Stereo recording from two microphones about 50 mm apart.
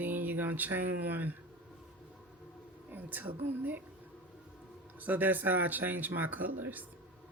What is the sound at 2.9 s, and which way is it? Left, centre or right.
Speech, right.